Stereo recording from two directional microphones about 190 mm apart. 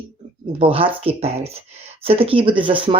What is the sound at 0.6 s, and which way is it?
Speech, 30° right (ahead or behind).